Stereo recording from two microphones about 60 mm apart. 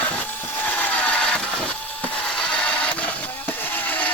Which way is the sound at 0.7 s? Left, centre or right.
Left.